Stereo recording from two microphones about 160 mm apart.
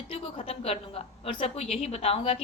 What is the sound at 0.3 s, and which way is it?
A woman's voice, 40° left (ahead or behind).